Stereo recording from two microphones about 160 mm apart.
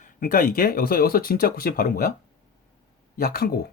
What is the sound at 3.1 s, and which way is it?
Speech, 65° left (ahead or behind).